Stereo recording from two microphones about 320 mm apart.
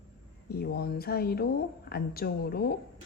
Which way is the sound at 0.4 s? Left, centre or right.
Left.